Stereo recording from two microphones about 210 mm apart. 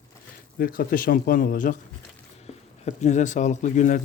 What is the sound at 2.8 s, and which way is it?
Speech, 30° left (ahead or behind).